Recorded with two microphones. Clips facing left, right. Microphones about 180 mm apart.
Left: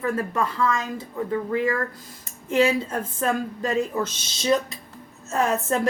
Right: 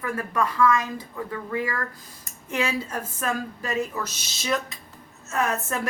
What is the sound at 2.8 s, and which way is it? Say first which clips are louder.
A woman's voice: left 4 dB; 30° left (ahead or behind).